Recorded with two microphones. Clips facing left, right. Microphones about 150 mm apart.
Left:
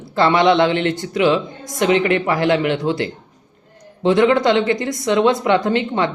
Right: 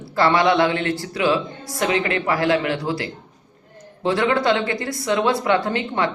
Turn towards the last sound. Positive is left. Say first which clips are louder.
# left 4 dB
turn(degrees=25)  # may be behind; listen again after turning